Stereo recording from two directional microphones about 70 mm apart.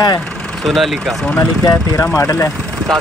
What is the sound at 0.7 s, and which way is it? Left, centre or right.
Speech, centre.